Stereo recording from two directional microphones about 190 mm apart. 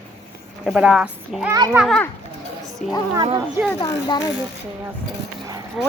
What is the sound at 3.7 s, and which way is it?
Speech, 20° left (ahead or behind).